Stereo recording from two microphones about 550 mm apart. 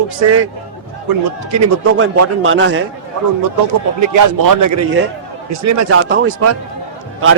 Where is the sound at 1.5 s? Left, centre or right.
Right.